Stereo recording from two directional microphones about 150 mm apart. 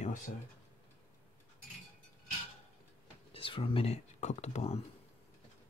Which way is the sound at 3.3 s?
35° left (ahead or behind).